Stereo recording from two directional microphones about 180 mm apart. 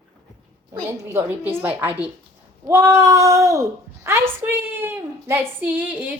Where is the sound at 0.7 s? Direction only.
15° right (ahead or behind).